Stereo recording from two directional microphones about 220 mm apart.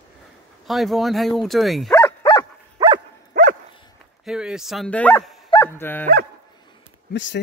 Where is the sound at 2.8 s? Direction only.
15° right (ahead or behind).